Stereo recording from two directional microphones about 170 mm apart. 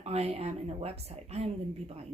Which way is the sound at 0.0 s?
35° right (ahead or behind).